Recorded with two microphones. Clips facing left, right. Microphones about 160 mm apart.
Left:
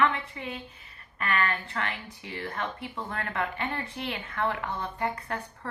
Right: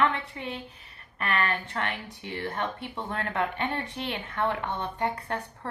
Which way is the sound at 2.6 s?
20° right (ahead or behind).